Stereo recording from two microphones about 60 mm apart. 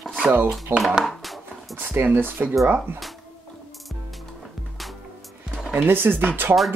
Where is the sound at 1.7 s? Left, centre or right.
Right.